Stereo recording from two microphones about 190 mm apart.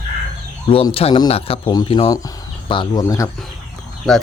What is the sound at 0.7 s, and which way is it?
Speech, 30° left (ahead or behind).